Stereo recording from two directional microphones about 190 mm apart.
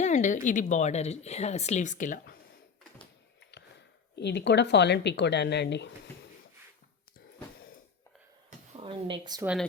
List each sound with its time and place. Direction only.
0.0 s speech: 40° left (ahead or behind)
4.1 s speech: 65° left (ahead or behind)
8.4 s a sound: 30° right (ahead or behind)